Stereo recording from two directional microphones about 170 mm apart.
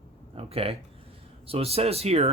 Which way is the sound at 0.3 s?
35° right (ahead or behind).